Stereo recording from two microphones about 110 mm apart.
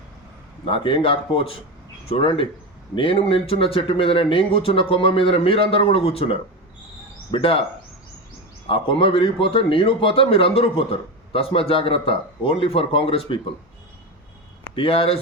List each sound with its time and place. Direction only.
0.6 s speech: 50° left (ahead or behind)
8.6 s speech: 55° left (ahead or behind)
14.8 s speech: 55° left (ahead or behind)